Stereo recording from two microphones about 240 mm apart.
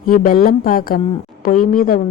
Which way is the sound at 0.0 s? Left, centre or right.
Left.